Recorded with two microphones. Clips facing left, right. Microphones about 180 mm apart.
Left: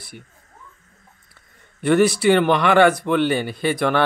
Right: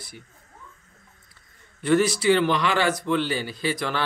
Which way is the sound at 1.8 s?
60° left (ahead or behind).